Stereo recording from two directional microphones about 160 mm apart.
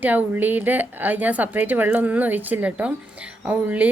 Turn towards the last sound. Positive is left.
turn(degrees=-10)  # may be behind; listen again after turning